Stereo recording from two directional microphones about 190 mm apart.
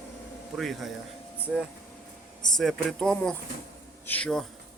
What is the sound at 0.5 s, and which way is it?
Speech, centre (ahead or behind).